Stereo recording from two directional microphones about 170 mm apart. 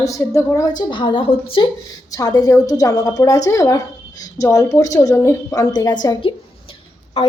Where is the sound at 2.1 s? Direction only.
20° left (ahead or behind).